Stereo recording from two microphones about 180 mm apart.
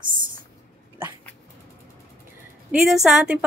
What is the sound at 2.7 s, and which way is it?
Speech, centre (ahead or behind).